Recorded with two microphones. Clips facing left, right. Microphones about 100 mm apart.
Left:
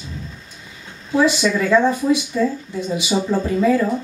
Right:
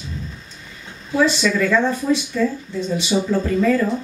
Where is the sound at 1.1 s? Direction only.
15° left (ahead or behind).